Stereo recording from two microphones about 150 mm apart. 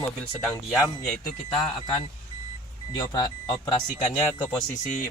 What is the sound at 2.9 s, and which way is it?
Speech, 25° left (ahead or behind).